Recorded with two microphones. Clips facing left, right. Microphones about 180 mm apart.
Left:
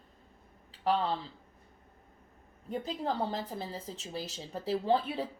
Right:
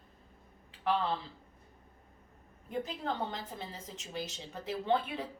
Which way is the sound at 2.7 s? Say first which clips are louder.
Left 2 dB; 35° left (ahead or behind).